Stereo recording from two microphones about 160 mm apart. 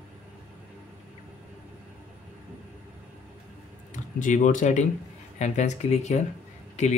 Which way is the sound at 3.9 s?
50° left (ahead or behind).